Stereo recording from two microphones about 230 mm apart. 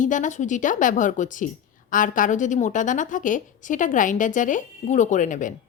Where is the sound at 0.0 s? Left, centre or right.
Left.